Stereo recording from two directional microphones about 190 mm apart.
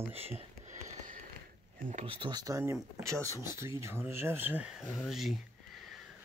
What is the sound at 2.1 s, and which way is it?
Speech, 25° right (ahead or behind).